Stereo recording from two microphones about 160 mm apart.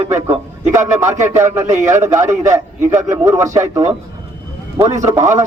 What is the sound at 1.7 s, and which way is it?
Speech, 50° right (ahead or behind).